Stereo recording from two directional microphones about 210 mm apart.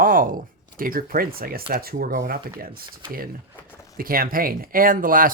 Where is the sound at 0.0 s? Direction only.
40° right (ahead or behind).